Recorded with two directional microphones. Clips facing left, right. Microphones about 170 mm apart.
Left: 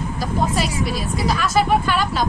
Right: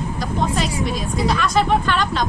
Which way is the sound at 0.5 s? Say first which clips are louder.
Even; 5° left (ahead or behind).